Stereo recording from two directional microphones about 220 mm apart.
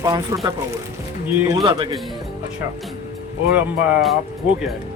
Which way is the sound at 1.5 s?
20° right (ahead or behind).